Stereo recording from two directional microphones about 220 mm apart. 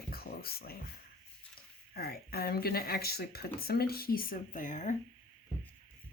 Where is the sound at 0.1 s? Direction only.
45° left (ahead or behind).